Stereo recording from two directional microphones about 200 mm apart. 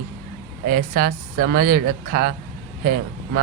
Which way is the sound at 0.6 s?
45° right (ahead or behind).